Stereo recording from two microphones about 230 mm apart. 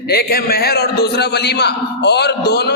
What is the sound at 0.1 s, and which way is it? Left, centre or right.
A man's voice, left.